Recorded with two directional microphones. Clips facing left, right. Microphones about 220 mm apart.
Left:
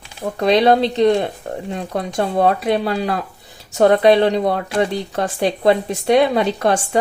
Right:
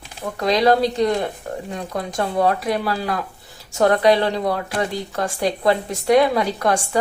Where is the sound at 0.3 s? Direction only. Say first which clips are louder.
Left 3 dB; 25° left (ahead or behind).